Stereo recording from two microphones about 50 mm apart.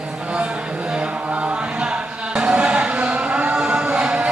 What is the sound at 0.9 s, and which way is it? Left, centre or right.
Chant, right.